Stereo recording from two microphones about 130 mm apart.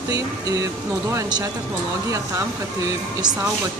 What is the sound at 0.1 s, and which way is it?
Speech, 30° right (ahead or behind).